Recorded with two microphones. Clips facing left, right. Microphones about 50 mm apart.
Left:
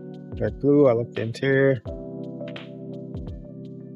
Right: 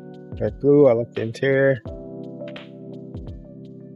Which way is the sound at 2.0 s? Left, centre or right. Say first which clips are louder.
Even; centre.